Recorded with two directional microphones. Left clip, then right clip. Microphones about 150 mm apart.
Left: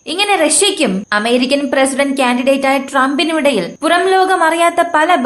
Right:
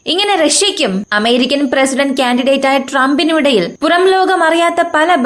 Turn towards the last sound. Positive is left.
turn(degrees=-35)  # may be behind; listen again after turning